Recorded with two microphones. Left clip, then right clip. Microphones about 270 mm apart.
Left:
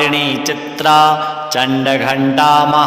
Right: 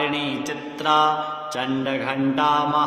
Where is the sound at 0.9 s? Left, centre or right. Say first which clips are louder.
Left 9 dB; left.